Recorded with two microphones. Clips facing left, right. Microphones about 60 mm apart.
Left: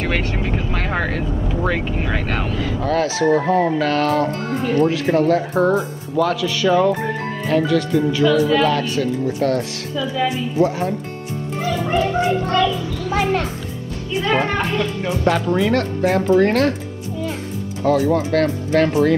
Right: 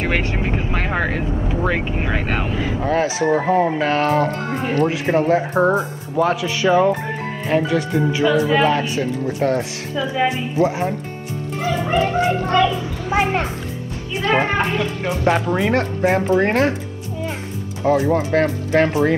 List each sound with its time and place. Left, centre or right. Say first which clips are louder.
0.0 s vehicle: right 1 dB; centre
1.3 s speech: even; centre; by 16.7 s right
17.8 s speech: even; right